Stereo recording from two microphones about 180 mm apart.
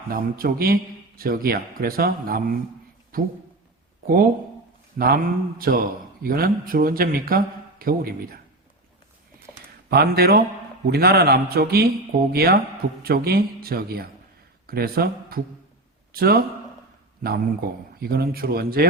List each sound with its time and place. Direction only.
0.1 s a man's voice: 55° right (ahead or behind)
9.9 s a man's voice: 60° right (ahead or behind)
18.0 s a man's voice: 60° right (ahead or behind)